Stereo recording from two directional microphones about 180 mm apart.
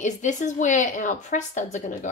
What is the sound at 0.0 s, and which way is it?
A woman's voice, 45° left (ahead or behind).